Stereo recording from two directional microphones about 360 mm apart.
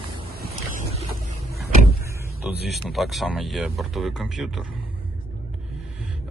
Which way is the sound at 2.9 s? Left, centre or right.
Centre.